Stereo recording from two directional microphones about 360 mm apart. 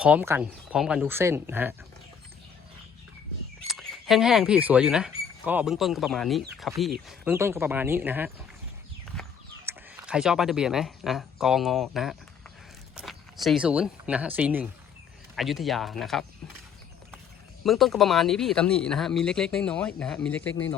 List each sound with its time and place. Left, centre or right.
0.0 s speech: centre
3.7 s speech: centre
9.6 s speech: centre
17.6 s speech: centre